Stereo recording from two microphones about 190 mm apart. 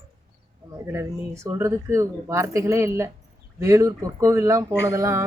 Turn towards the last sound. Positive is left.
turn(degrees=-15)  # may be behind; listen again after turning